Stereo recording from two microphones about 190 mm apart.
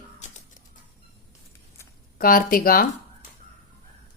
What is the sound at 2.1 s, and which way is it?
Speech, 50° left (ahead or behind).